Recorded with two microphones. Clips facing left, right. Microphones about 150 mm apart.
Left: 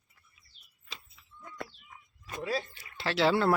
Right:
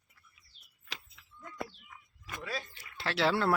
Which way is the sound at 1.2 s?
90° right.